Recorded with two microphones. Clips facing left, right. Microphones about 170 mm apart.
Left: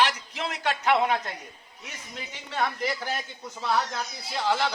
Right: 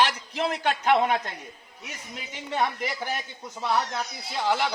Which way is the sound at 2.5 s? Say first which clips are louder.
Right 1 dB; 15° right (ahead or behind).